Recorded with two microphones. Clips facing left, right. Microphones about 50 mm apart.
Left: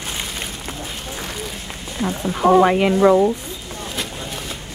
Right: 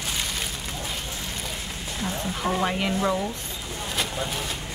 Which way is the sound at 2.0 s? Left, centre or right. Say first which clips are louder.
Left 10 dB; left.